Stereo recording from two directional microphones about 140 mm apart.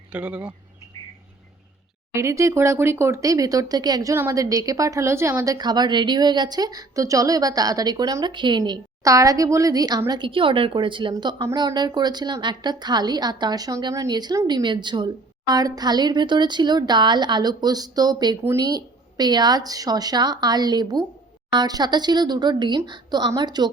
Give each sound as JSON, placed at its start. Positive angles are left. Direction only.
{"t": 0.1, "sound": "speech", "side_deg": -10}
{"t": 2.1, "sound": "a woman's voice", "side_deg": -20}